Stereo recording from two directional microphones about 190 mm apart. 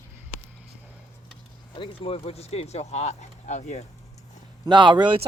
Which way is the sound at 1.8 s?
30° left (ahead or behind).